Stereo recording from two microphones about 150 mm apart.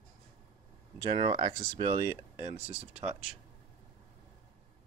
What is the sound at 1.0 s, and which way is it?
Speech, 30° right (ahead or behind).